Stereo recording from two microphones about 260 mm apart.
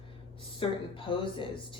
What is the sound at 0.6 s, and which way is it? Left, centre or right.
Speech, centre.